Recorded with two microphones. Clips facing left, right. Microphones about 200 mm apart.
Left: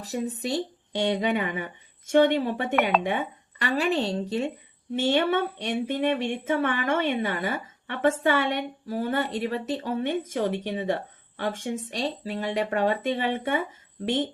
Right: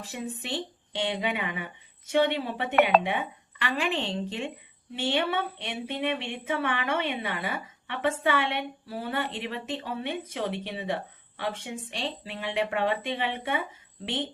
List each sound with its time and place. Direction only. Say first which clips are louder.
0.0 s speech: left 6 dB; 40° left (ahead or behind)